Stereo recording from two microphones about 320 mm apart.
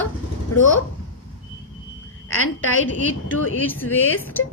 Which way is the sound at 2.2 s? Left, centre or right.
Left.